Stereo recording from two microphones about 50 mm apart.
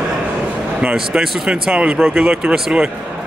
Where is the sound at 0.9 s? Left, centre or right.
Centre.